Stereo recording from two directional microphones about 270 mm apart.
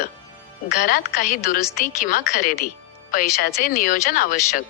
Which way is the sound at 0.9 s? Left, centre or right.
Left.